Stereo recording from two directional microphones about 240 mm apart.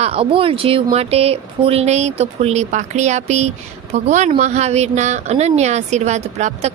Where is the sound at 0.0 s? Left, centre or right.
Right.